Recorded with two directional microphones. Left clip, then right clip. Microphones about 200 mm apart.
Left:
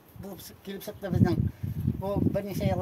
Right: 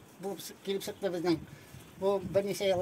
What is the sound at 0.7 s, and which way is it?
Speech, 10° left (ahead or behind).